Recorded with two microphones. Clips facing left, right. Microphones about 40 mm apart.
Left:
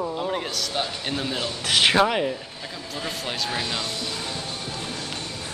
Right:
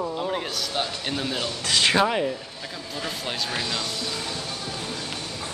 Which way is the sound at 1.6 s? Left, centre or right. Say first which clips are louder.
Left 2 dB; centre.